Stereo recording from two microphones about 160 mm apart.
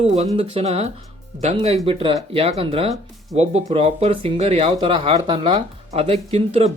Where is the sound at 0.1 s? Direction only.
40° right (ahead or behind).